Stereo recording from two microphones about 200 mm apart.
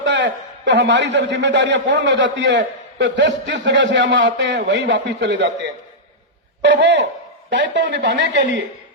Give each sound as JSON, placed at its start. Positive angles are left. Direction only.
{"t": 0.0, "sound": "a man's voice", "side_deg": -65}